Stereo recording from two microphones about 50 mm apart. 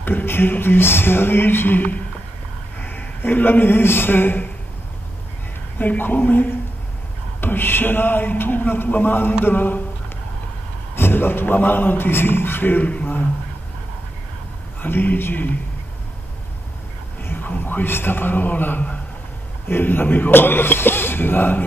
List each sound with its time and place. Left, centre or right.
0.0 s a man's voice: left
5.8 s a woman's voice: left
11.0 s speech: left
13.0 s a sound: left
14.8 s a woman's voice: left
17.2 s a sound: left
17.5 s a man's voice: left